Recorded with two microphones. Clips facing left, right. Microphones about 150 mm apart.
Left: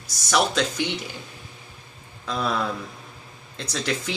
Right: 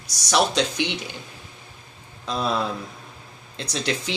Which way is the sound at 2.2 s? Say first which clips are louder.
Right 1 dB; 20° right (ahead or behind).